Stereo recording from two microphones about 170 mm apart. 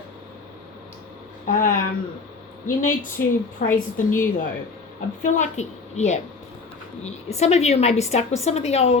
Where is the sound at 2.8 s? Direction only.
50° left (ahead or behind).